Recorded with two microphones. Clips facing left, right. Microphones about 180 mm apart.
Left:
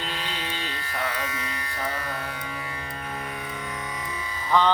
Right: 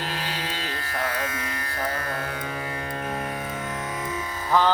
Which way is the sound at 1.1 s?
45° right (ahead or behind).